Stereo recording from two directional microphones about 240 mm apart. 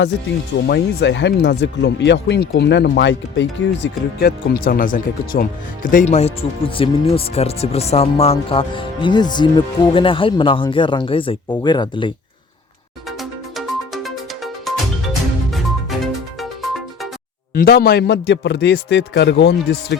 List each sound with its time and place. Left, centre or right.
0.7 s speech: left; by 12.1 s centre
13.1 s music: centre
17.5 s a man's voice: left